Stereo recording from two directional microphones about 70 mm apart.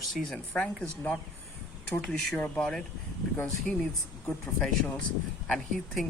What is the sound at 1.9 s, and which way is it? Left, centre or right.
Speech, centre.